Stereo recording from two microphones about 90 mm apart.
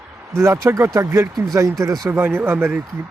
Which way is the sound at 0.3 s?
30° right (ahead or behind).